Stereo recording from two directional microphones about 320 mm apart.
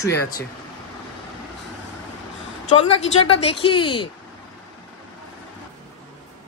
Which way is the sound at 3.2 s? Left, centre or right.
Centre.